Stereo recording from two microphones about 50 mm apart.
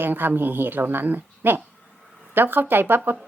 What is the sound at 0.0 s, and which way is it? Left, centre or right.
A woman's voice, right.